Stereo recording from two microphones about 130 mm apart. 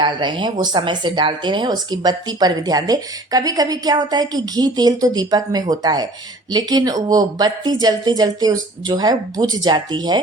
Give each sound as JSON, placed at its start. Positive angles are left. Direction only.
{"t": 0.0, "sound": "speech", "side_deg": -35}